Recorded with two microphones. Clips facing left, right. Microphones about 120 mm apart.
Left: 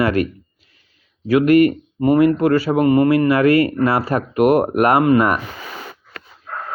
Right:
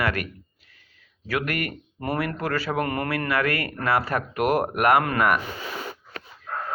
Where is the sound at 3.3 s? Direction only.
30° left (ahead or behind).